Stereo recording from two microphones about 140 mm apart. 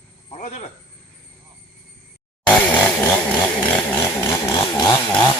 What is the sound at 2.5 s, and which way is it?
Chainsaw, 10° left (ahead or behind).